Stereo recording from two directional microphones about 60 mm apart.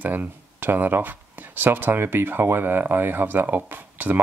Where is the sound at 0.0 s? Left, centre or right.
Right.